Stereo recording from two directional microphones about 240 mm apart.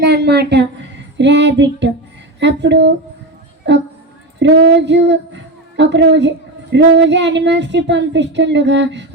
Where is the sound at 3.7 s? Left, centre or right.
Right.